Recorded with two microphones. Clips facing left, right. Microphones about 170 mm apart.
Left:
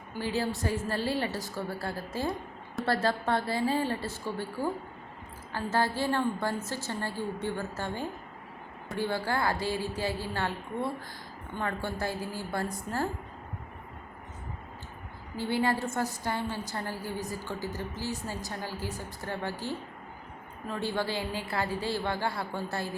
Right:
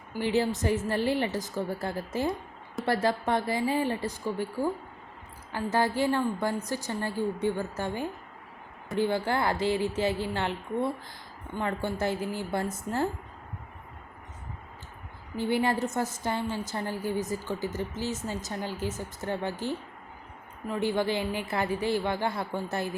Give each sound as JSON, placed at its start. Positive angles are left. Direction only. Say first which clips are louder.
{"t": 0.2, "sound": "a woman's voice", "louder": "right 4 dB", "side_deg": -20}
{"t": 5.5, "sound": "a woman's voice", "louder": "right 2 dB", "side_deg": -15}
{"t": 11.5, "sound": "a woman's voice", "louder": "right 3 dB", "side_deg": -20}
{"t": 15.4, "sound": "a woman's voice", "louder": "right 2 dB", "side_deg": -20}